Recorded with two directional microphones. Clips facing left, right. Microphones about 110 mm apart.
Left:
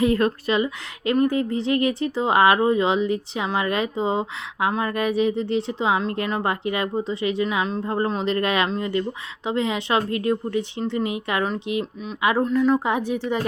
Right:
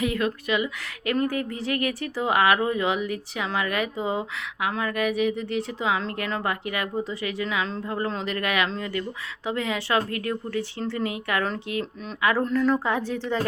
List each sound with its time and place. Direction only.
0.0 s speech: 40° left (ahead or behind)
1.1 s speech: 25° left (ahead or behind)